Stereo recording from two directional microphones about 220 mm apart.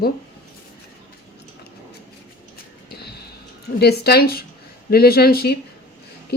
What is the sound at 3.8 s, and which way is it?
Speech, 45° left (ahead or behind).